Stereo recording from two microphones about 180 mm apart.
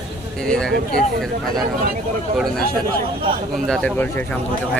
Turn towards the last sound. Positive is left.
turn(degrees=10)  # may be behind; listen again after turning